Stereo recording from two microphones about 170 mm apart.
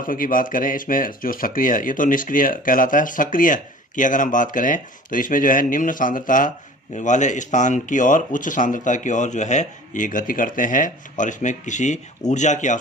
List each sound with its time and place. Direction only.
0.0 s speech: 55° left (ahead or behind)